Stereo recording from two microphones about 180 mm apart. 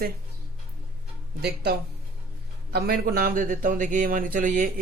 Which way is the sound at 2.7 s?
60° right (ahead or behind).